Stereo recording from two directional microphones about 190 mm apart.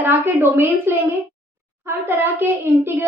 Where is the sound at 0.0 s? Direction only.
10° right (ahead or behind).